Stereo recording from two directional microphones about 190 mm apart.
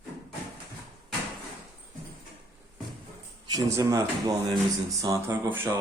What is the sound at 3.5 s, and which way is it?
Speech, 20° right (ahead or behind).